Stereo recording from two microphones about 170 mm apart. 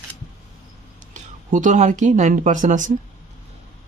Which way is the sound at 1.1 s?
50° right (ahead or behind).